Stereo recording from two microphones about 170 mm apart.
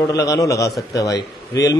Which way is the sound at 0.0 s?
20° left (ahead or behind).